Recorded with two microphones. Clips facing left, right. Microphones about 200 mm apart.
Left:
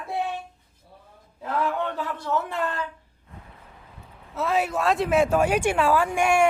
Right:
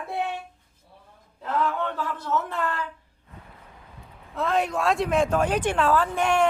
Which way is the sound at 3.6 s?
Centre (ahead or behind).